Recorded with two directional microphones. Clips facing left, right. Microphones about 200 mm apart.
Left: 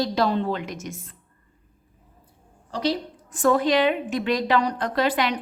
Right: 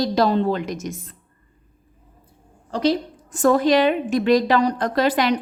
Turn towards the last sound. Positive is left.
turn(degrees=-40)  # may be behind; listen again after turning